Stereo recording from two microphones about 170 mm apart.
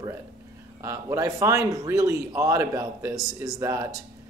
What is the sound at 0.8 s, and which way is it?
Speech, 20° right (ahead or behind).